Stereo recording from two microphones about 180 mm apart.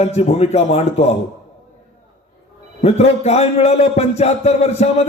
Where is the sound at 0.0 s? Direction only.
35° left (ahead or behind).